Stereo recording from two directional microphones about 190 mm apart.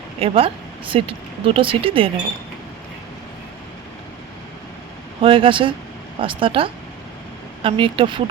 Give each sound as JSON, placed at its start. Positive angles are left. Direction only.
{"t": 0.2, "sound": "speech", "side_deg": -30}
{"t": 5.2, "sound": "speech", "side_deg": -25}